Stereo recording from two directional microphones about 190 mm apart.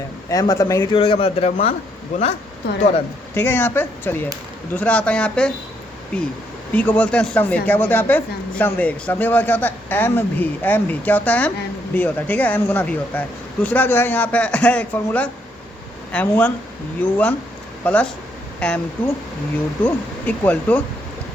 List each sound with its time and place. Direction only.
0.3 s speech: 20° left (ahead or behind)
0.9 s speech: 30° left (ahead or behind)
3.3 s a man's voice: 10° left (ahead or behind)